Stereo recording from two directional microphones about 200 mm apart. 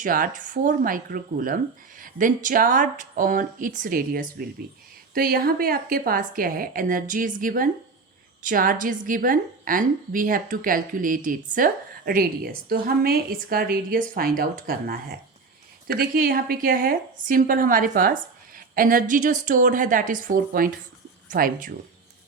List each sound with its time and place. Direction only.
0.0 s a woman's voice: 40° right (ahead or behind)